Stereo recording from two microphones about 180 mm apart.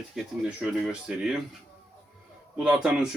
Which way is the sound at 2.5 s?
5° right (ahead or behind).